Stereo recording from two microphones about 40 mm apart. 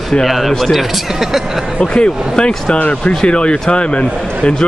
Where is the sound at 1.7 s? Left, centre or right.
Left.